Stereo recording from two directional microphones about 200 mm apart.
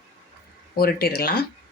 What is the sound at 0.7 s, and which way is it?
Speech, 50° left (ahead or behind).